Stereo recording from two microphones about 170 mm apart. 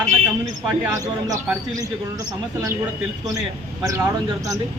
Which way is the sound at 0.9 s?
20° right (ahead or behind).